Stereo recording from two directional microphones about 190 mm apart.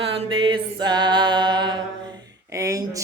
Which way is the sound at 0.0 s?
25° right (ahead or behind).